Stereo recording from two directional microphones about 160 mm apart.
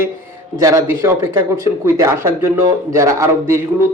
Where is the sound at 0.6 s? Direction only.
20° right (ahead or behind).